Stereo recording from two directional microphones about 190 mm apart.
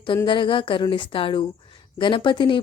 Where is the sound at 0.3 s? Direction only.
25° left (ahead or behind).